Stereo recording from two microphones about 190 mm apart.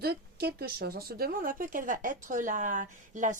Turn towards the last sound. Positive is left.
turn(degrees=-40)  # may be behind; listen again after turning